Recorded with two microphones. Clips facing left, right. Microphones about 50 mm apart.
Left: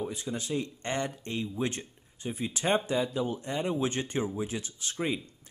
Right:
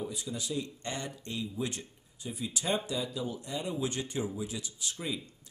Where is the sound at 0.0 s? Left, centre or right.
Left.